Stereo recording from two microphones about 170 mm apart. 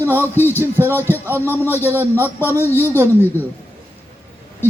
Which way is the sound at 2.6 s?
15° left (ahead or behind).